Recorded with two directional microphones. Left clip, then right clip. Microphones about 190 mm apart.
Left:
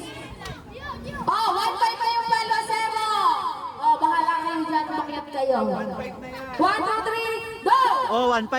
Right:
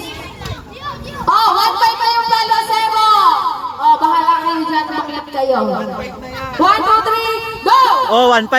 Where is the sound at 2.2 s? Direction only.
30° right (ahead or behind).